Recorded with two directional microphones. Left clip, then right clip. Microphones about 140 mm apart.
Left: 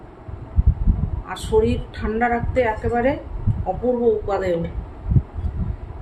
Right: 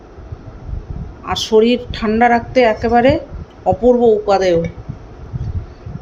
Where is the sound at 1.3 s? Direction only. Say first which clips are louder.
Right 7 dB; 90° right.